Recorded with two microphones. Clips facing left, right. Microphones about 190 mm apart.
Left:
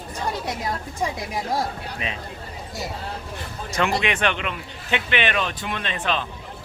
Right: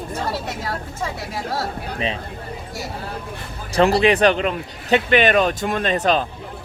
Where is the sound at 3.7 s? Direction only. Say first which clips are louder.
Right 8 dB; 35° right (ahead or behind).